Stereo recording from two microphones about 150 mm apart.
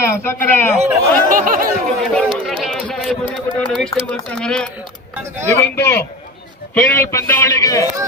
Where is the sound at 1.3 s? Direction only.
65° right (ahead or behind).